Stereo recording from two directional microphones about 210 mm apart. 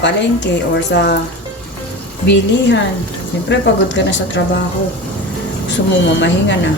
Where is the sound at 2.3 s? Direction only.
55° left (ahead or behind).